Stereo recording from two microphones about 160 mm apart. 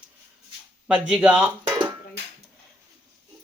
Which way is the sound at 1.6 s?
25° right (ahead or behind).